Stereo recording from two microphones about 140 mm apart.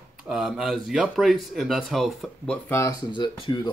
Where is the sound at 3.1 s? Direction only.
35° left (ahead or behind).